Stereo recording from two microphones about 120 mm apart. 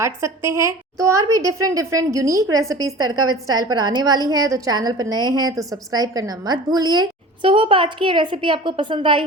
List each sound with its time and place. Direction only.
0.0 s a woman's voice: 25° right (ahead or behind); by 9.2 s 45° right (ahead or behind)